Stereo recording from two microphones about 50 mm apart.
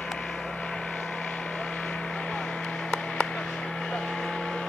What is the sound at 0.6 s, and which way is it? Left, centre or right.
Vehicle, left.